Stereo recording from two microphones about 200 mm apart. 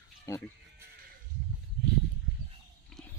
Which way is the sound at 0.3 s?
15° left (ahead or behind).